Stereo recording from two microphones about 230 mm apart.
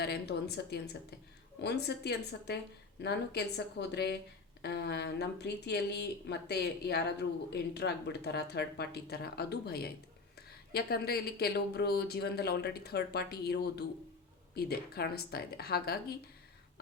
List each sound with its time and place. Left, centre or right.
0.0 s speech: left